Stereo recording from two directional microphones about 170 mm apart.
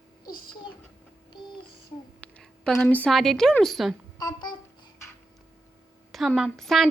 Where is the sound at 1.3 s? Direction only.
25° left (ahead or behind).